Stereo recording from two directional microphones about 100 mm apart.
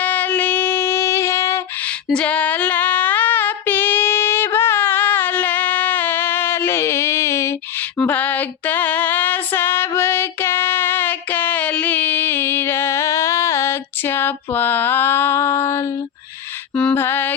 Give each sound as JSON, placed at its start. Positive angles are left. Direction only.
{"t": 0.0, "sound": "music", "side_deg": 15}
{"t": 2.1, "sound": "female singing", "side_deg": 15}
{"t": 7.9, "sound": "female singing", "side_deg": 15}
{"t": 16.9, "sound": "mantra", "side_deg": 20}